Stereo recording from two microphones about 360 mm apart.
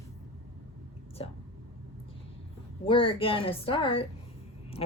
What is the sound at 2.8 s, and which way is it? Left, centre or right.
A woman's voice, centre.